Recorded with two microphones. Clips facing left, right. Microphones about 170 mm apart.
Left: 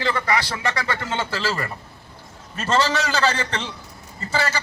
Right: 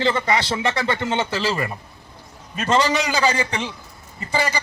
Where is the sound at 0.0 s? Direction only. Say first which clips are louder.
Right 2 dB; 25° right (ahead or behind).